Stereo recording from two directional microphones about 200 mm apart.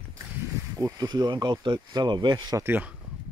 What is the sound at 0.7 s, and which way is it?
Speech, 15° right (ahead or behind).